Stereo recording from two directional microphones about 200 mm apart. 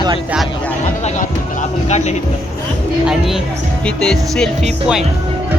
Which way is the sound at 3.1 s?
Centre (ahead or behind).